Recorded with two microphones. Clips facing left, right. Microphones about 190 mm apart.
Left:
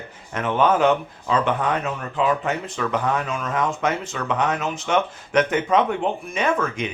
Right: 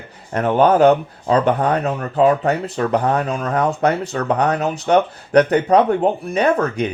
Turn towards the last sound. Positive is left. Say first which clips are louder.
# right 6 dB
turn(degrees=-35)  # may be behind; listen again after turning